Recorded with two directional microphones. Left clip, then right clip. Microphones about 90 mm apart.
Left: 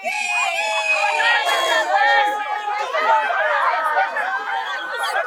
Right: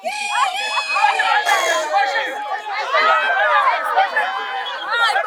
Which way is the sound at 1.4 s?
5° right (ahead or behind).